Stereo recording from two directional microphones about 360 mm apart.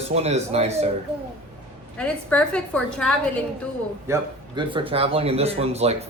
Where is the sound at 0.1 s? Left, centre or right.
Centre.